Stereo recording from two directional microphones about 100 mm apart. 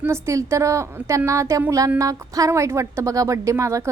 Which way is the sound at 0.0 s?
25° right (ahead or behind).